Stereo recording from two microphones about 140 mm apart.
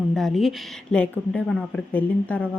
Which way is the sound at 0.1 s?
Centre (ahead or behind).